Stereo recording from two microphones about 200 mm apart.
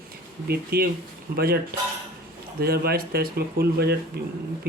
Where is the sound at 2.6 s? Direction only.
50° right (ahead or behind).